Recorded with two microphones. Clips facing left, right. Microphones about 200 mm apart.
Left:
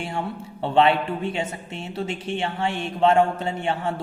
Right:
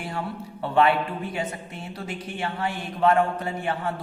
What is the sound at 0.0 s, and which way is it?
A woman's voice, 25° left (ahead or behind).